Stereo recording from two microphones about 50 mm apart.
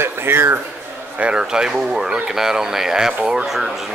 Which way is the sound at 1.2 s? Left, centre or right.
Centre.